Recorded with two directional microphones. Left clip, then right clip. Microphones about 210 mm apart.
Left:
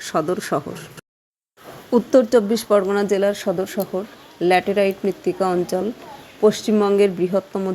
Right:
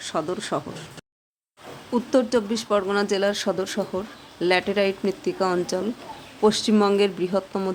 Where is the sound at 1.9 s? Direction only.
20° left (ahead or behind).